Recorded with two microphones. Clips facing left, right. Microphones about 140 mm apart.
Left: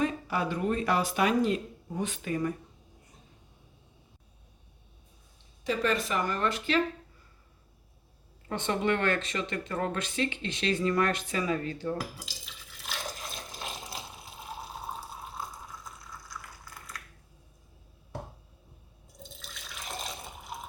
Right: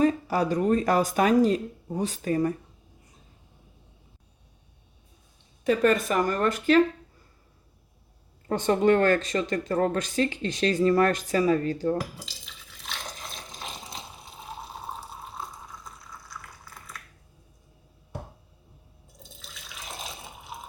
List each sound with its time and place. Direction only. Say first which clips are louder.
0.0 s speech: right 6 dB; 40° right (ahead or behind)
5.6 s speech: right 7 dB; 50° right (ahead or behind)
8.4 s speech: right 7 dB; 40° right (ahead or behind)
12.7 s water: left 1 dB; centre (ahead or behind)
19.2 s water: left 1 dB; centre (ahead or behind)